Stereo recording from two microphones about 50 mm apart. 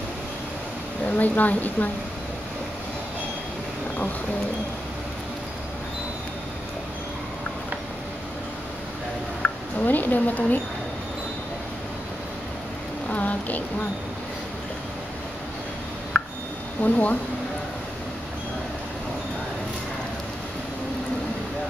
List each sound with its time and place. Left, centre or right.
1.0 s speech: left
9.4 s speech: left
13.1 s speech: left
16.1 s a sound: left
16.8 s speech: left